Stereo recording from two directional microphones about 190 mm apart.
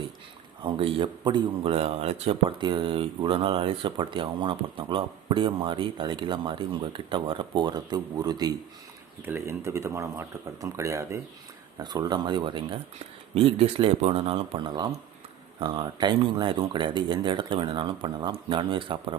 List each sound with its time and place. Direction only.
0.6 s a man's voice: 30° right (ahead or behind)